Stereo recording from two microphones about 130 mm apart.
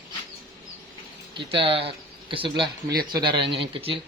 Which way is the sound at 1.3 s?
40° right (ahead or behind).